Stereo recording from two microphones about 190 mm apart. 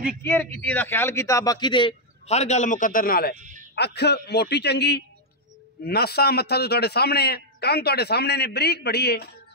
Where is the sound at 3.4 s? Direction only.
40° right (ahead or behind).